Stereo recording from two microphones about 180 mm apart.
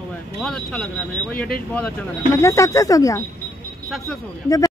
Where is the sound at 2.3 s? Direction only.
15° left (ahead or behind).